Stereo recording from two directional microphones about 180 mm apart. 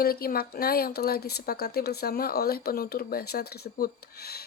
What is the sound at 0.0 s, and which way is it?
Speech, 55° left (ahead or behind).